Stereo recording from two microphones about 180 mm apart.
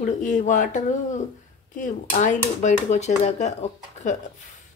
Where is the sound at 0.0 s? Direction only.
45° left (ahead or behind).